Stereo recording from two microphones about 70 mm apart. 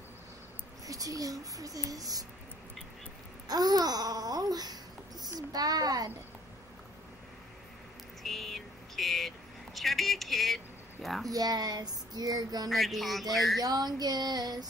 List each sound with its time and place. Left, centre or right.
0.8 s speech: right
3.4 s babbling: right
5.2 s speech: right
8.2 s a sound: centre
9.8 s speech: centre
11.2 s child singing: right
12.6 s a sound: centre
13.6 s child singing: right